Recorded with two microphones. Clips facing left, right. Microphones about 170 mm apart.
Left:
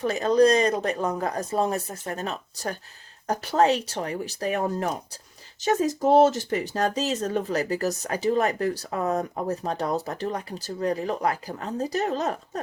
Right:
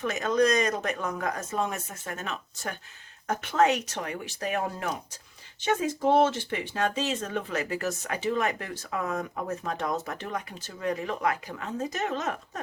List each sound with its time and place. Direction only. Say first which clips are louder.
0.0 s speech: left 5 dB; 35° left (ahead or behind)